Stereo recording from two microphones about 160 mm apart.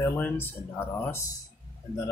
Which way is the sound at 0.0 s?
10° left (ahead or behind).